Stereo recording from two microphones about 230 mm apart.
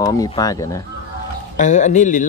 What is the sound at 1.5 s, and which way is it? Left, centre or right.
Speech, left.